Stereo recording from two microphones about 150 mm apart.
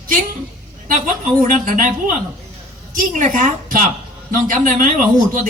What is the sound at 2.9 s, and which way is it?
A woman's voice, 60° right (ahead or behind).